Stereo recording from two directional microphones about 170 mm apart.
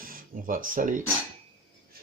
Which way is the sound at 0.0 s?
55° right (ahead or behind).